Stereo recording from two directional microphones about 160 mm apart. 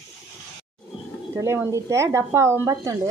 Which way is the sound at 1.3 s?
15° right (ahead or behind).